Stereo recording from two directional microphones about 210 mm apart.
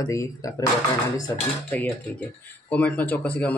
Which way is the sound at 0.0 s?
15° left (ahead or behind).